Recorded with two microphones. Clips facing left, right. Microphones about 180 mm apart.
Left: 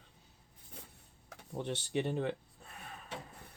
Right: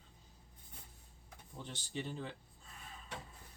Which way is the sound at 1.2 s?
70° left (ahead or behind).